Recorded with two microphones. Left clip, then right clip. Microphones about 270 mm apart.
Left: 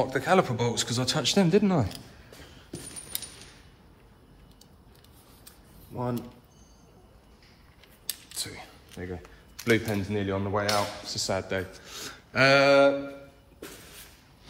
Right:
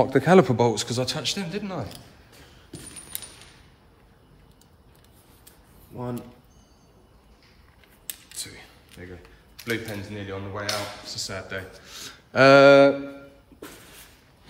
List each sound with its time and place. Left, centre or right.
0.0 s speech: right
0.5 s speech: centre; by 2.0 s left
8.4 s a sound: centre
9.7 s speech: left
10.7 s speech: centre
12.3 s a sound: centre